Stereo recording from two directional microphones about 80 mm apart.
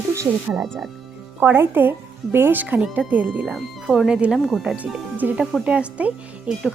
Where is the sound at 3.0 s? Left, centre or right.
Centre.